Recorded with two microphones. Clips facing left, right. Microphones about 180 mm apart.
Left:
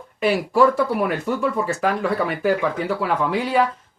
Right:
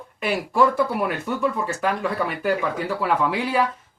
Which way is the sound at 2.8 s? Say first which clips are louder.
Even; centre (ahead or behind).